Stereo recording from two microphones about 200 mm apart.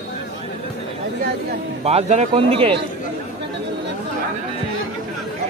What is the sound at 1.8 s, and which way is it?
A man's voice, 30° right (ahead or behind).